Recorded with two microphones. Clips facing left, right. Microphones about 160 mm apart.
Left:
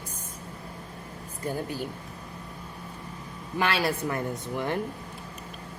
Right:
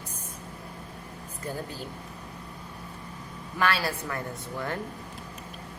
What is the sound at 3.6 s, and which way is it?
A woman's voice, 20° left (ahead or behind).